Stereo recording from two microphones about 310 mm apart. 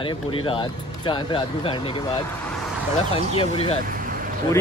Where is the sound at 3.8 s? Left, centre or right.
Right.